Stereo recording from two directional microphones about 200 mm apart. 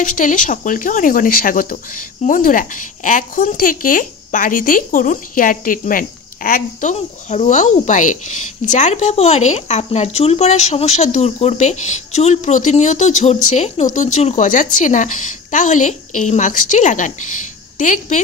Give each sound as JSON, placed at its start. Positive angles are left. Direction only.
{"t": 0.0, "sound": "speech", "side_deg": 40}